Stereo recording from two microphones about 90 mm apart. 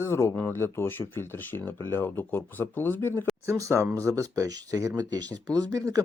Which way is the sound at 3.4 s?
30° right (ahead or behind).